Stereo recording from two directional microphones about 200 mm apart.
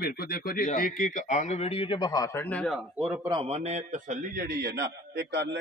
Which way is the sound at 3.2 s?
25° right (ahead or behind).